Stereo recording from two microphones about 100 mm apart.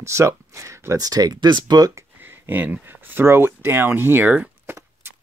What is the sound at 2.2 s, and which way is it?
Speech, 20° right (ahead or behind).